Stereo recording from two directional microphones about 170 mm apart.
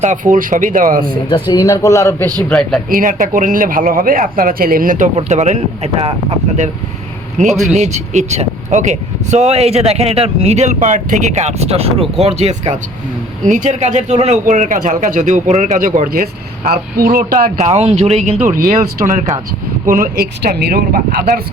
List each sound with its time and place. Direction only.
0.0 s speech: 45° right (ahead or behind)
1.3 s speech: 25° left (ahead or behind)
2.5 s a man's voice: centre (ahead or behind)
2.9 s speech: 50° right (ahead or behind)
7.3 s speech: 45° right (ahead or behind)
17.6 s speech: 40° right (ahead or behind)
18.4 s speech: 50° right (ahead or behind)
19.8 s speech: 55° right (ahead or behind)